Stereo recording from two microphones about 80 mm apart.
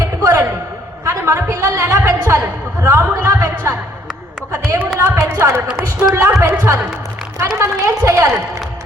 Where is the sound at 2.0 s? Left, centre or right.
Right.